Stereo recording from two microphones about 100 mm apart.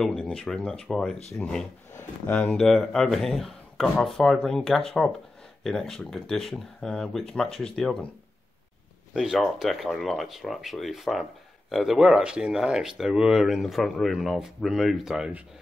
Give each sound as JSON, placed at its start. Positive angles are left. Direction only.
{"t": 0.0, "sound": "speech", "side_deg": 5}
{"t": 2.2, "sound": "speech", "side_deg": 15}
{"t": 2.5, "sound": "speech", "side_deg": 5}
{"t": 9.1, "sound": "speech", "side_deg": -5}